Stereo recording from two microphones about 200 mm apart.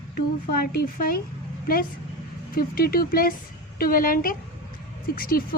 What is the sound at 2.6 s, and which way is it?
Speech, 45° left (ahead or behind).